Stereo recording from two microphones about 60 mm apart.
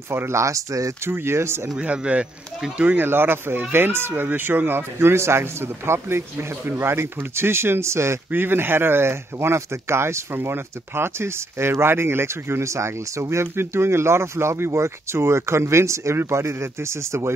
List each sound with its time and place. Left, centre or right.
0.1 s speech: right
0.4 s speech: right
1.0 s speech: right
1.8 s speech: right
2.8 s speech: right
8.3 s speech: right